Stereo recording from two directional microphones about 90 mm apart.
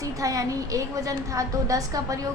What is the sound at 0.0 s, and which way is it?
A woman's voice, 40° right (ahead or behind).